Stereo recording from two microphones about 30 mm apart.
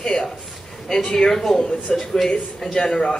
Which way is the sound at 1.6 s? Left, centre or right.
Left.